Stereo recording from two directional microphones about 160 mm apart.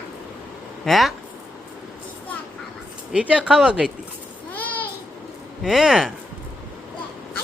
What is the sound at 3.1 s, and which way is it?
Speech, 5° right (ahead or behind).